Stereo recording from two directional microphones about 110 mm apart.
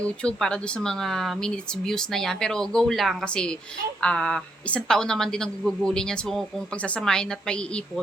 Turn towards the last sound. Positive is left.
turn(degrees=10)  # may be behind; listen again after turning